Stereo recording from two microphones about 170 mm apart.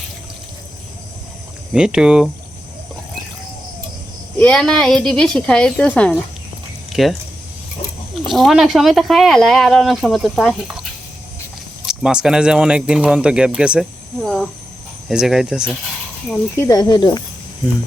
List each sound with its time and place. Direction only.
1.7 s speech: 5° right (ahead or behind)
4.4 s speech: 5° left (ahead or behind)
8.3 s speech: centre (ahead or behind)
11.9 s speech: 5° right (ahead or behind)
16.6 s speech: 20° left (ahead or behind)